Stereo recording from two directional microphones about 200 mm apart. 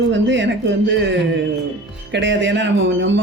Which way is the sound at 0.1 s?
65° right (ahead or behind).